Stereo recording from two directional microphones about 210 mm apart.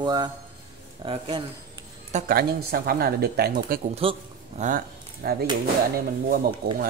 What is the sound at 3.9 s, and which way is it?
Speech, 25° right (ahead or behind).